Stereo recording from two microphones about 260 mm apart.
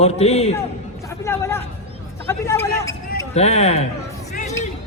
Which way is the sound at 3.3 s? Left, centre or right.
Left.